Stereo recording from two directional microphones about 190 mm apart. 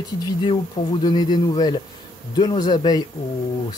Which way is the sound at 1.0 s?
20° left (ahead or behind).